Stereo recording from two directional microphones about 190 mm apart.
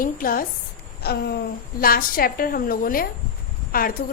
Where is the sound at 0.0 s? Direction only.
45° left (ahead or behind).